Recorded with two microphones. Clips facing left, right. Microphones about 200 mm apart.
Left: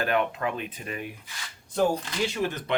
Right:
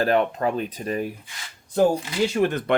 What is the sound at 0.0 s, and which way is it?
Speech, 35° right (ahead or behind).